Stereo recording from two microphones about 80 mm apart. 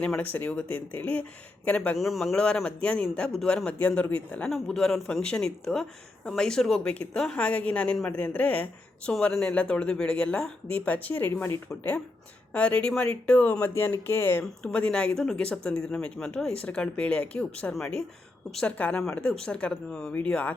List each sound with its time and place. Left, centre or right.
0.2 s speech: centre
2.0 s a man's voice: centre
2.3 s speech: centre
4.4 s a man's voice: centre; by 14.4 s left
14.6 s speech: centre